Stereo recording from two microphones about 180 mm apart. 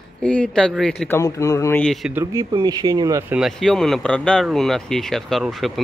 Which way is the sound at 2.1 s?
15° right (ahead or behind).